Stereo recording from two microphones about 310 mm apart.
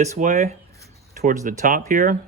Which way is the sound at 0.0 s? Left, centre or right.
Right.